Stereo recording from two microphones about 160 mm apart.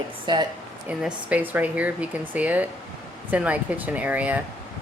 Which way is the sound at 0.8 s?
10° right (ahead or behind).